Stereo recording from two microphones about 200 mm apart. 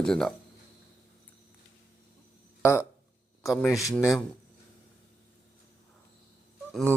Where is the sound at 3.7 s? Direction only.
15° left (ahead or behind).